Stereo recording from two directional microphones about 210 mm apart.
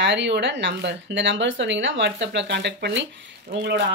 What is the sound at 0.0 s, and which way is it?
Speech, 55° right (ahead or behind).